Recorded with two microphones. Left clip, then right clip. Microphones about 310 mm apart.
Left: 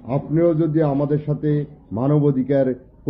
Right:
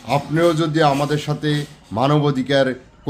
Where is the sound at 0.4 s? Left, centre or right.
Centre.